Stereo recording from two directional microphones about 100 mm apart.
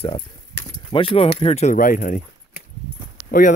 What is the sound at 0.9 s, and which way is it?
Speech, 70° left (ahead or behind).